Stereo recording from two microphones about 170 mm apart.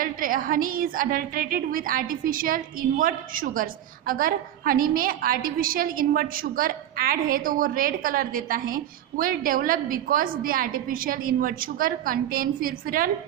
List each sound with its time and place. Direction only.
0.0 s a woman's voice: 55° right (ahead or behind)